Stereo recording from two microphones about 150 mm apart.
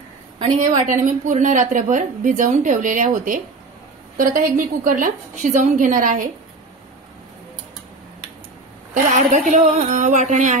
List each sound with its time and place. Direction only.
0.4 s a woman's voice: 50° right (ahead or behind)
8.9 s a woman's voice: 60° right (ahead or behind)